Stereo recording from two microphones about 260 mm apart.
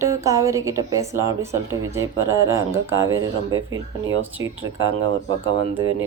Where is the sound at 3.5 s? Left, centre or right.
Right.